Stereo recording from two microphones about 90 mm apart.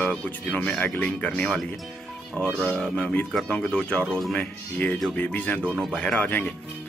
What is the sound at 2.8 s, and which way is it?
Speech, 10° left (ahead or behind).